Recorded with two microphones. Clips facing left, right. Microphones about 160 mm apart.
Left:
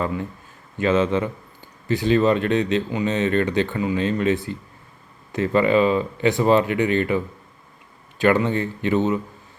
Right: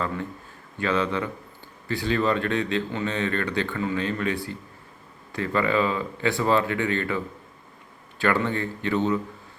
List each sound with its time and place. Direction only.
0.8 s speech: 20° left (ahead or behind)
8.2 s speech: 20° left (ahead or behind)